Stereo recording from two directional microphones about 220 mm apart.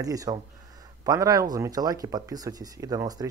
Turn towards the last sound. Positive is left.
turn(degrees=-15)  # may be behind; listen again after turning